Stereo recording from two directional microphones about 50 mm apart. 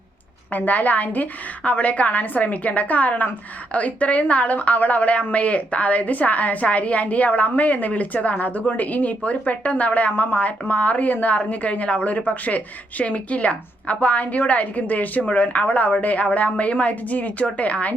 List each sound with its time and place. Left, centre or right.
0.5 s a woman's voice: left